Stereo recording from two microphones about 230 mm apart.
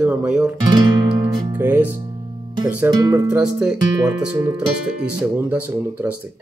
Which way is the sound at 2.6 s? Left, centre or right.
Centre.